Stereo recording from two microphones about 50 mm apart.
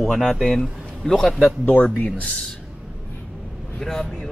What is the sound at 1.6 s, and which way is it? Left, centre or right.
Speech, left.